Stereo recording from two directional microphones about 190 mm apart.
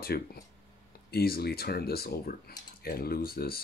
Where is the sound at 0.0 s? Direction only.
55° left (ahead or behind).